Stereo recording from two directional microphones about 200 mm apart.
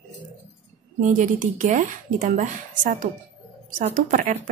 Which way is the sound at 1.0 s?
40° right (ahead or behind).